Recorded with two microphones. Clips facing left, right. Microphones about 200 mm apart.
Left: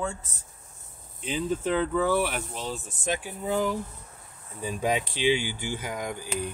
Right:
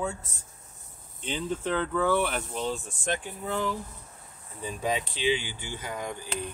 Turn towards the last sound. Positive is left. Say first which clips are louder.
# left 2 dB
turn(degrees=10)  # may be behind; listen again after turning